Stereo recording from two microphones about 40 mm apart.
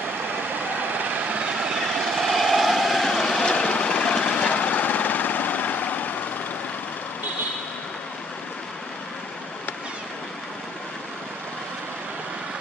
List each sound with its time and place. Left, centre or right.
0.7 s vehicle: right
1.6 s vehicle: centre
3.5 s a sound: left